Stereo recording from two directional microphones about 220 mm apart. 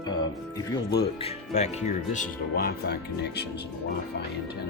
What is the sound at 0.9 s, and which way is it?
Speech, 20° left (ahead or behind).